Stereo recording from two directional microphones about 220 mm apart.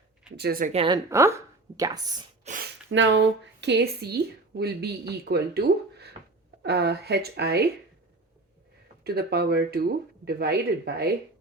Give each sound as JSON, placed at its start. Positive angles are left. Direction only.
{"t": 0.3, "sound": "a woman's voice", "side_deg": -45}
{"t": 0.7, "sound": "a woman's voice", "side_deg": -25}
{"t": 1.1, "sound": "speech", "side_deg": -10}
{"t": 2.4, "sound": "speech", "side_deg": -35}
{"t": 2.9, "sound": "a woman's voice", "side_deg": -55}
{"t": 9.0, "sound": "a woman's voice", "side_deg": -45}